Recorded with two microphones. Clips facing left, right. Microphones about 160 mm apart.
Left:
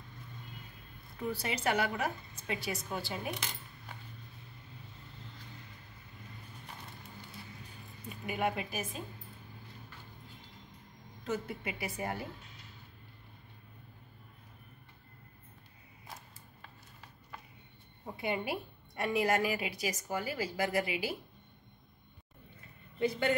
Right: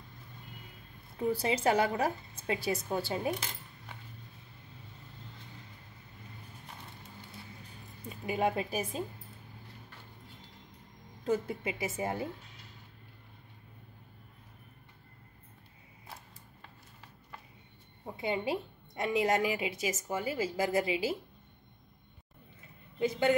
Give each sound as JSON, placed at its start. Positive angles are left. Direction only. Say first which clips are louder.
{"t": 1.1, "sound": "a woman's voice", "louder": "right 6 dB", "side_deg": -25}
{"t": 8.1, "sound": "speech", "louder": "right 3 dB", "side_deg": -30}
{"t": 11.2, "sound": "a woman's voice", "louder": "right 5 dB", "side_deg": -30}
{"t": 18.1, "sound": "a woman's voice", "louder": "right 2 dB", "side_deg": -25}
{"t": 22.9, "sound": "speech", "louder": "right 3 dB", "side_deg": -20}